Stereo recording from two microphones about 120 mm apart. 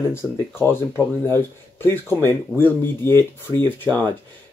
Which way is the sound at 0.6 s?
20° left (ahead or behind).